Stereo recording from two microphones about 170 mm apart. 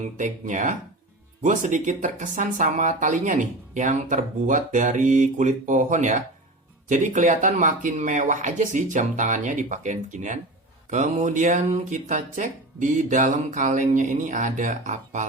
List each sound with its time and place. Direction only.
0.0 s speech: 45° right (ahead or behind)